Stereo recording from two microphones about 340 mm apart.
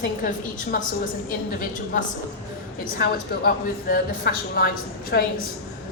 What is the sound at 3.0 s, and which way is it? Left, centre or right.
A woman's voice, left.